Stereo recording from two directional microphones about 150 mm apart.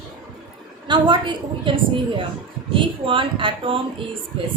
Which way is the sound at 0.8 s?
30° right (ahead or behind).